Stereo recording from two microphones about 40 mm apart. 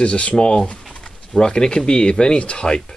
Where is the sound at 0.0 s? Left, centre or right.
Left.